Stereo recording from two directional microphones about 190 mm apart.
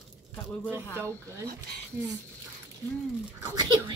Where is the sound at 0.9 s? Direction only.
15° right (ahead or behind).